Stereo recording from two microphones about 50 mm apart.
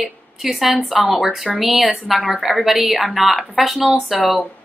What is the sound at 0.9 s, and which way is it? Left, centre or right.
Speech, right.